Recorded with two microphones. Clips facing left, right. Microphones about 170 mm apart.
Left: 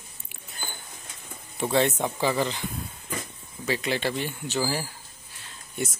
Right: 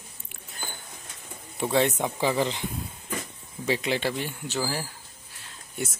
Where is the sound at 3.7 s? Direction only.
15° right (ahead or behind).